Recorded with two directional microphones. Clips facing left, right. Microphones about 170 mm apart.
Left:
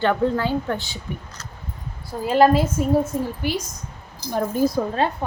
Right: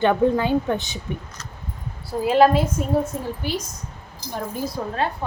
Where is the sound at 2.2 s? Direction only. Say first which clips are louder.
Even; centre (ahead or behind).